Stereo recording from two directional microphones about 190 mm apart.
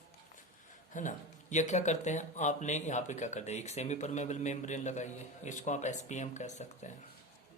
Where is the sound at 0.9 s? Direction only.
40° left (ahead or behind).